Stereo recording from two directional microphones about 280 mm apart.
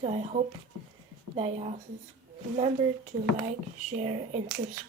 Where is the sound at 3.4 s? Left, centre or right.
Right.